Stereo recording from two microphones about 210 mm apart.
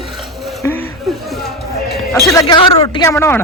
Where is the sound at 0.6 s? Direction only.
10° left (ahead or behind).